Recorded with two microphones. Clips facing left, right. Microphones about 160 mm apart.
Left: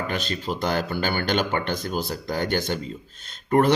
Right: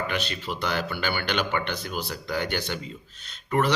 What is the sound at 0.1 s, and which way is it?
Speech, 40° left (ahead or behind).